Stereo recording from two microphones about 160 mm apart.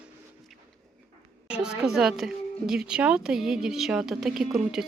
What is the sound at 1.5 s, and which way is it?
A woman's voice, 5° right (ahead or behind).